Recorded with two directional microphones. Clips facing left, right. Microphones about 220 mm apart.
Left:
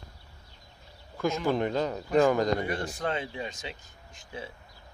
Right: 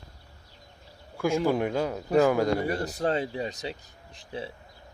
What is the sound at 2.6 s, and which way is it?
Speech, 40° right (ahead or behind).